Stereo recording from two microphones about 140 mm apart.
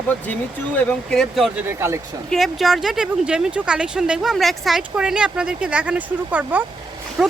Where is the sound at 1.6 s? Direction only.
20° right (ahead or behind).